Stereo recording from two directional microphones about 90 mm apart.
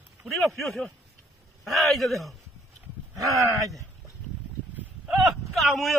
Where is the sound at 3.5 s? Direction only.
40° right (ahead or behind).